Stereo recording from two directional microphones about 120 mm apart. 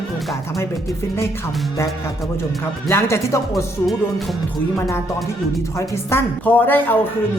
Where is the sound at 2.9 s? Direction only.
20° left (ahead or behind).